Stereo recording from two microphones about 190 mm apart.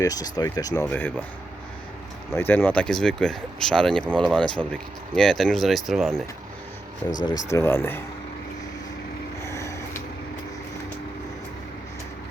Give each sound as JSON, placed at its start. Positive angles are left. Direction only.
{"t": 0.0, "sound": "speech", "side_deg": 20}
{"t": 2.3, "sound": "speech", "side_deg": 10}
{"t": 7.3, "sound": "speech", "side_deg": 15}
{"t": 9.4, "sound": "a sound", "side_deg": 15}